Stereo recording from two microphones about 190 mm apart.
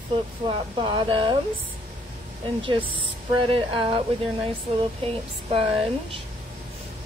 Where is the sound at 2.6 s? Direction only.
25° right (ahead or behind).